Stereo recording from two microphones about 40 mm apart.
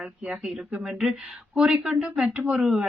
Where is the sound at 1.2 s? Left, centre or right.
Right.